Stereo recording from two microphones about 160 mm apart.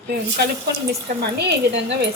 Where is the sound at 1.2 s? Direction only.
90° right.